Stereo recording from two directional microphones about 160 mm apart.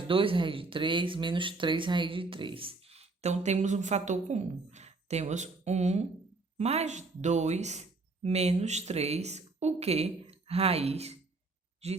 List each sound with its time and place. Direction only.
0.1 s speech: 35° right (ahead or behind)